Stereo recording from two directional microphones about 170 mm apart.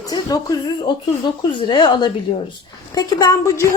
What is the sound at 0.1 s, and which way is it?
Speech, 20° left (ahead or behind).